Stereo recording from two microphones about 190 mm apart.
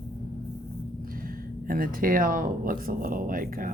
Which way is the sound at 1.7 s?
50° right (ahead or behind).